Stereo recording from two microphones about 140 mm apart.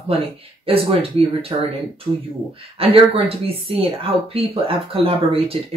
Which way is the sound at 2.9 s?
45° right (ahead or behind).